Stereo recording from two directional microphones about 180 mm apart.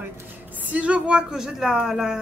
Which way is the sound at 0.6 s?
10° right (ahead or behind).